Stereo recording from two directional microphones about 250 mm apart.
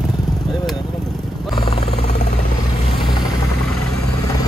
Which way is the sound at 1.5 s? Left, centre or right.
Centre.